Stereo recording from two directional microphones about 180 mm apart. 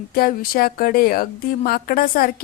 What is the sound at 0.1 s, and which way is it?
Speech, 55° left (ahead or behind).